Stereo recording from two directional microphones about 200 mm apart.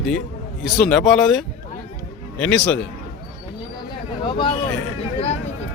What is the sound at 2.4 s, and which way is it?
Speech, 5° left (ahead or behind).